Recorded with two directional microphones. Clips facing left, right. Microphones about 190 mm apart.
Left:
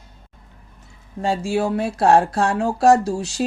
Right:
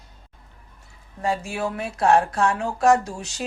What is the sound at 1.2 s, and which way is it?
Speech, 30° left (ahead or behind).